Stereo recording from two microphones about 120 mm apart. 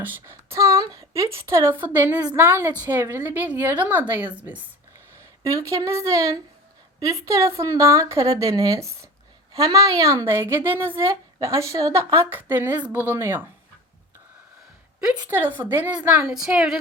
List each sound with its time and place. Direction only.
0.0 s a woman's voice: 20° right (ahead or behind)
5.4 s a woman's voice: 25° right (ahead or behind)
15.0 s a woman's voice: 10° right (ahead or behind)